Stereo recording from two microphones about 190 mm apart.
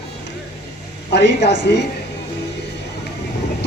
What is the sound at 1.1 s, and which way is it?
Speech, 65° left (ahead or behind).